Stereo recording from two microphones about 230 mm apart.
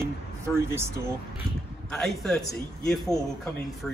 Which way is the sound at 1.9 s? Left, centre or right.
Centre.